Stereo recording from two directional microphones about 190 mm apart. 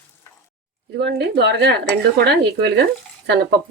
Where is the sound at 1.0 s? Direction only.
60° right (ahead or behind).